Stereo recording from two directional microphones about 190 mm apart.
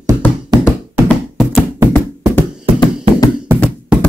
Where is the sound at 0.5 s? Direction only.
20° right (ahead or behind).